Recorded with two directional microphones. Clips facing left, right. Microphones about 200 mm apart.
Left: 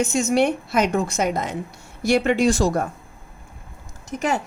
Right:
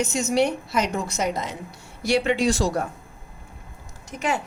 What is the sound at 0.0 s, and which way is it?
A woman's voice, 55° left (ahead or behind).